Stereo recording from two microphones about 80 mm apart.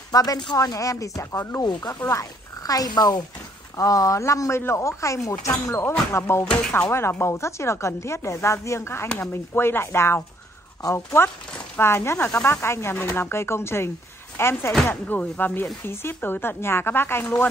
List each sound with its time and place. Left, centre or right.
0.1 s speech: left
0.6 s speech: left
1.6 s speech: left
10.8 s speech: left
11.7 s speech: left